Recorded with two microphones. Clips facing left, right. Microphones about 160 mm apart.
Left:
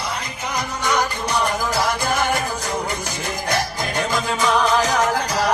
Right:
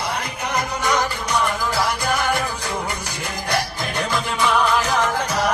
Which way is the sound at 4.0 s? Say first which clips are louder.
Left 1 dB; 45° left (ahead or behind).